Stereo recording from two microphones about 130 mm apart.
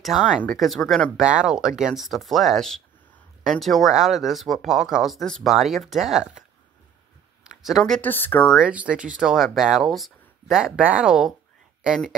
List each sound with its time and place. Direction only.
0.0 s speech: centre (ahead or behind)
7.4 s speech: centre (ahead or behind)
8.0 s speech: 15° left (ahead or behind)
8.5 s speech: 10° right (ahead or behind)